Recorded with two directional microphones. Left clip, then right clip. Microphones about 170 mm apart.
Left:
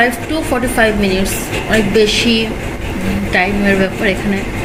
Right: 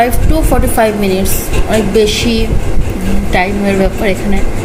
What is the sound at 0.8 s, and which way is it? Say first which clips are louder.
Speech: right 1 dB; 15° right (ahead or behind).